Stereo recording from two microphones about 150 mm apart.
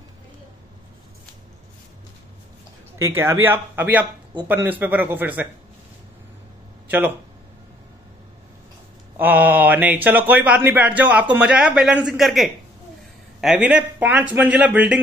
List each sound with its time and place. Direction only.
3.0 s speech: 15° right (ahead or behind)
9.1 s speech: 10° right (ahead or behind)